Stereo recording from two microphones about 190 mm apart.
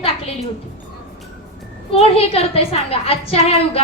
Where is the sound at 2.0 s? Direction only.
30° left (ahead or behind).